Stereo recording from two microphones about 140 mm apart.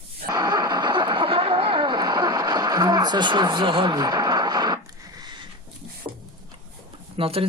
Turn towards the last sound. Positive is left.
turn(degrees=-40)  # may be behind; listen again after turning